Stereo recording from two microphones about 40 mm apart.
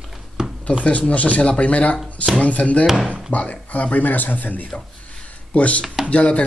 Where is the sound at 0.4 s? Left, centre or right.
Centre.